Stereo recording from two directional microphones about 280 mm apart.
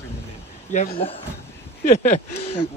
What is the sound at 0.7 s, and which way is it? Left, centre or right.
Speech, left.